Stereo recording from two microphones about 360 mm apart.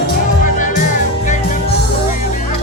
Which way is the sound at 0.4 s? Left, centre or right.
Left.